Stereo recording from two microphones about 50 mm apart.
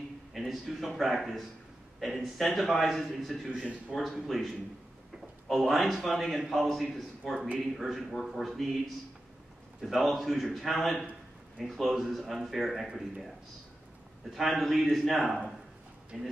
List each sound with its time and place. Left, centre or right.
0.3 s a man's voice: centre
3.4 s a man's voice: right
3.9 s a man's voice: centre
14.3 s a man's voice: centre